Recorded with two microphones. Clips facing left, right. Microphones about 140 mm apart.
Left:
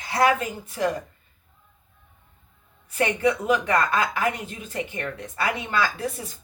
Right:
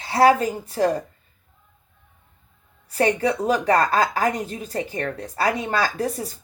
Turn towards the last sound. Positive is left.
turn(degrees=-40)  # may be behind; listen again after turning